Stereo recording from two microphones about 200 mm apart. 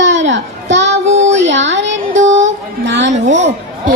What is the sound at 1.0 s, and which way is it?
Child singing, 35° right (ahead or behind).